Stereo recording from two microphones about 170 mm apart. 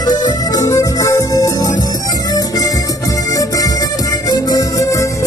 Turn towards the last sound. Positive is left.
turn(degrees=20)  # may be behind; listen again after turning